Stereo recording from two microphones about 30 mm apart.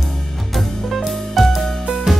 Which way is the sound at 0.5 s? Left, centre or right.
Centre.